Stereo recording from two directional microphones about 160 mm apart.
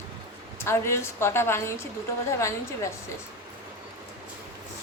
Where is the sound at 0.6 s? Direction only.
15° left (ahead or behind).